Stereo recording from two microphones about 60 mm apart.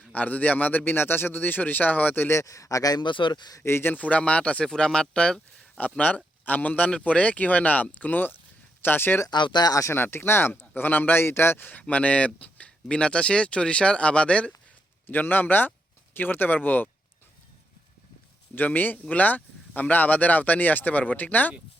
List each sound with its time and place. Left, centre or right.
0.1 s a man's voice: left
2.3 s speech: left
3.6 s a man's voice: left
3.9 s speech: left
5.7 s speech: left
9.2 s speech: left
9.9 s speech: left; by 14.5 s centre
15.0 s a man's voice: left
18.5 s speech: left